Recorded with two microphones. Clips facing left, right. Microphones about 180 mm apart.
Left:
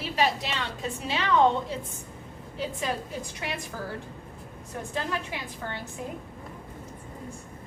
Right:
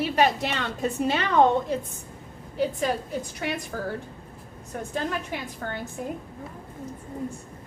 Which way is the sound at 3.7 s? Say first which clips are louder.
Right 5 dB; 50° right (ahead or behind).